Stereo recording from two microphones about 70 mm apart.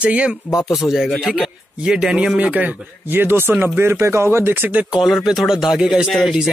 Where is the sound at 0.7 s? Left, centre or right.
Centre.